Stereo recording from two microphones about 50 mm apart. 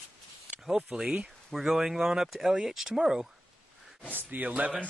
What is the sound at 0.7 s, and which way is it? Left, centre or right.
Speech, centre.